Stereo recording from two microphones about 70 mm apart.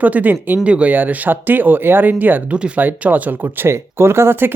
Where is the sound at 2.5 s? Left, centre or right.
Centre.